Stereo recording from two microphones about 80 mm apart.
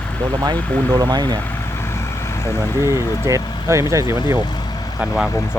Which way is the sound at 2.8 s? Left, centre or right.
Right.